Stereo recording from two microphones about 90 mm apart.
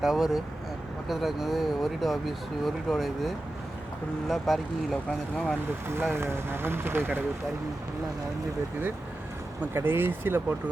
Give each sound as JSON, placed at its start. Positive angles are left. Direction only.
{"t": 0.0, "sound": "speech", "side_deg": -5}
{"t": 5.9, "sound": "speech", "side_deg": -25}
{"t": 9.7, "sound": "speech", "side_deg": -25}